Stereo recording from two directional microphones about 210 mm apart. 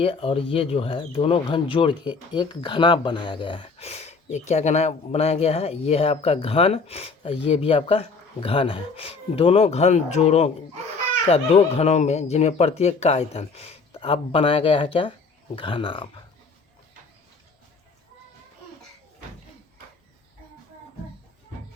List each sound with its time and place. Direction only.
0.0 s speech: 25° left (ahead or behind)